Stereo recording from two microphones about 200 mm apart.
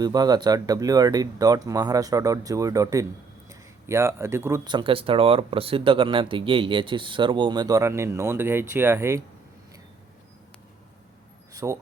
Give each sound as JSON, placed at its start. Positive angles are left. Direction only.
{"t": 0.0, "sound": "speech", "side_deg": -20}
{"t": 11.5, "sound": "speech", "side_deg": -15}